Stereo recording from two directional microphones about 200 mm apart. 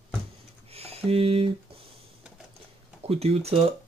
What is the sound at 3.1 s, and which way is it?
Speech, 30° right (ahead or behind).